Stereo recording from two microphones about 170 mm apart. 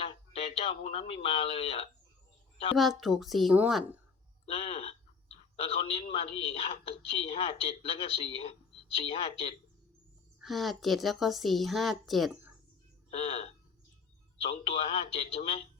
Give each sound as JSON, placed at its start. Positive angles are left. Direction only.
{"t": 0.0, "sound": "speech", "side_deg": 35}
{"t": 2.7, "sound": "a woman's voice", "side_deg": 0}
{"t": 4.4, "sound": "speech", "side_deg": 35}
{"t": 10.4, "sound": "a woman's voice", "side_deg": 0}
{"t": 13.1, "sound": "speech", "side_deg": 35}